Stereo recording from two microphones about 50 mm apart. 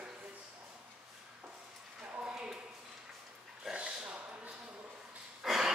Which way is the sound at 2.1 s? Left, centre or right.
Centre.